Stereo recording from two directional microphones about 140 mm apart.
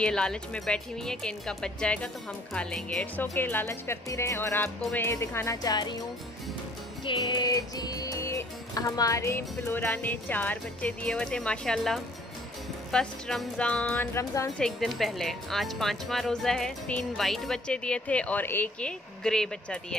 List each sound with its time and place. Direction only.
0.0 s speech: 5° left (ahead or behind)
2.5 s music: 5° left (ahead or behind); by 5.9 s 30° left (ahead or behind)
7.1 s music: 30° left (ahead or behind); by 14.0 s 10° left (ahead or behind)
14.1 s speech: 20° left (ahead or behind)
14.6 s speech: 5° left (ahead or behind)